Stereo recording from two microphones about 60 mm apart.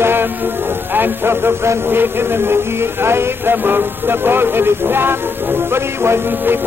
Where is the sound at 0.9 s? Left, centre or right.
Right.